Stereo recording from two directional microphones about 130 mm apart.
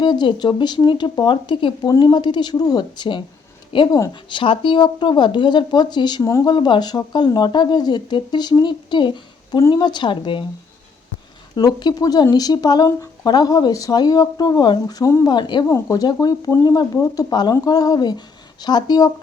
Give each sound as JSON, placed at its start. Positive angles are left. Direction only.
{"t": 0.0, "sound": "speech", "side_deg": 35}
{"t": 6.2, "sound": "speech", "side_deg": 20}
{"t": 6.5, "sound": "speech", "side_deg": 35}
{"t": 9.6, "sound": "speech", "side_deg": 25}
{"t": 9.8, "sound": "speech", "side_deg": 35}
{"t": 11.5, "sound": "speech", "side_deg": 35}